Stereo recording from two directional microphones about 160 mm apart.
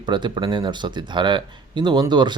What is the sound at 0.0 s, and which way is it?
Speech, 30° right (ahead or behind).